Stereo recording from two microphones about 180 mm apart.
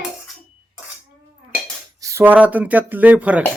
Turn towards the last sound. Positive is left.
turn(degrees=-10)  # may be behind; listen again after turning